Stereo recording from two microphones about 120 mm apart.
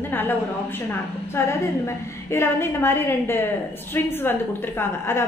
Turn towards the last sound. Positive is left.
turn(degrees=20)  # may be behind; listen again after turning